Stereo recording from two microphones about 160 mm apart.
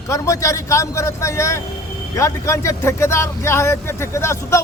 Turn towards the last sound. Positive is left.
turn(degrees=15)  # may be behind; listen again after turning